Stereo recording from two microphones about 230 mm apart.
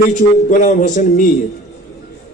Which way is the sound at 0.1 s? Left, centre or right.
Left.